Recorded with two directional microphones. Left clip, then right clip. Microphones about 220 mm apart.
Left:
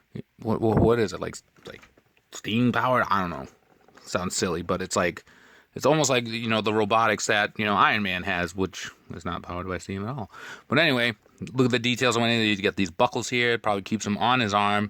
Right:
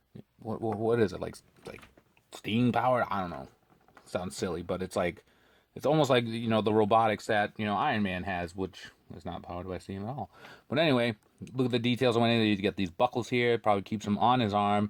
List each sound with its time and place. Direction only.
0.1 s speech: 35° left (ahead or behind)